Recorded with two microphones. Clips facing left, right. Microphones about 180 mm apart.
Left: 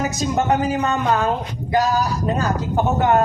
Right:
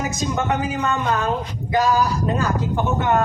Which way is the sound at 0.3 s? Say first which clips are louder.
Left 6 dB; 35° left (ahead or behind).